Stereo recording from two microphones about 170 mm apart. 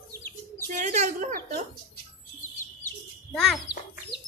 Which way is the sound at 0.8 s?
45° right (ahead or behind).